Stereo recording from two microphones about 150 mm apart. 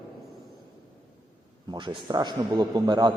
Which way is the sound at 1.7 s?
30° right (ahead or behind).